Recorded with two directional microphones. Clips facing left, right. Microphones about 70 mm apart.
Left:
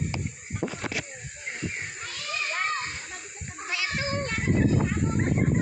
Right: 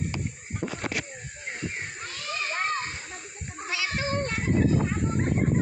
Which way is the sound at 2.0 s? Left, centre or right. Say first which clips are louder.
Even; right.